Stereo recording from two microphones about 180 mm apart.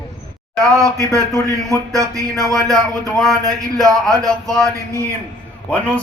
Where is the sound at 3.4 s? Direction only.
20° right (ahead or behind).